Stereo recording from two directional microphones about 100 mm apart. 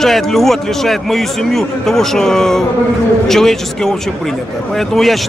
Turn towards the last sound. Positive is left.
turn(degrees=5)  # may be behind; listen again after turning